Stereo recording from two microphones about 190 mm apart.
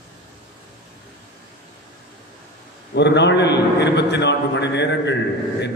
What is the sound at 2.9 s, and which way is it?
A man's voice, 65° left (ahead or behind).